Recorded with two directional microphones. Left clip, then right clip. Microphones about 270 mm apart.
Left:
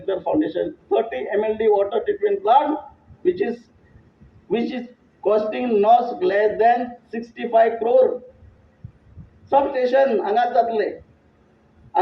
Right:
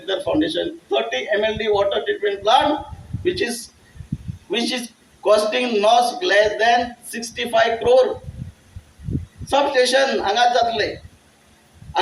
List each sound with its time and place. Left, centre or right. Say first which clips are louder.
0.0 s a man's voice: right 1 dB; right
5.2 s a man's voice: right 3 dB; right
9.5 s a man's voice: right 1 dB; right